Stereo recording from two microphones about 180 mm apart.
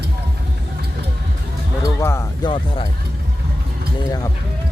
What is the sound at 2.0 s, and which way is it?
Speech, 15° left (ahead or behind).